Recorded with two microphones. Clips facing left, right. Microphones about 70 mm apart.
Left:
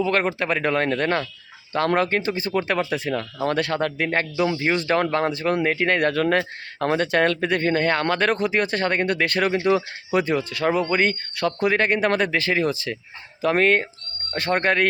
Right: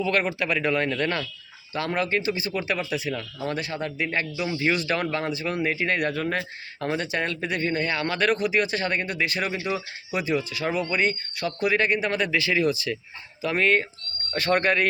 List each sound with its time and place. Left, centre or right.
0.0 s speech: left
4.5 s speech: left